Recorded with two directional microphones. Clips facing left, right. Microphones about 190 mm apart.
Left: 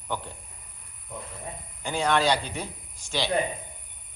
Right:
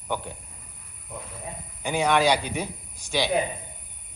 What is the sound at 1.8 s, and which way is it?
A man's voice, 15° right (ahead or behind).